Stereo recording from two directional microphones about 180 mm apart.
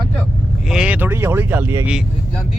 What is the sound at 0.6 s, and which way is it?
Speech, 5° right (ahead or behind).